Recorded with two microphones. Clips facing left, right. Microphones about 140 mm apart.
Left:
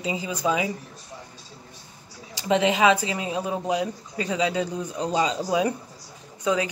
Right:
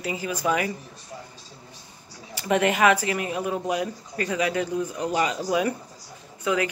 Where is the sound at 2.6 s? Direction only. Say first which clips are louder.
Even; 15° left (ahead or behind).